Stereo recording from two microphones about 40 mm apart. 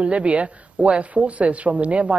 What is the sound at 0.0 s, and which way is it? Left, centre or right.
A man's voice, right.